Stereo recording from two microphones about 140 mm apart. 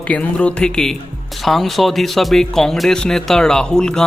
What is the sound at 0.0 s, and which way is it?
A man's voice, 10° left (ahead or behind).